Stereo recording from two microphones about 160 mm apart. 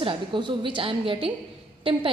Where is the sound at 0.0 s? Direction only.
35° right (ahead or behind).